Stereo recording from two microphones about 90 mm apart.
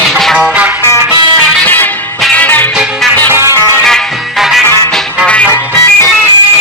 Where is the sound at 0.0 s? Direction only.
5° left (ahead or behind).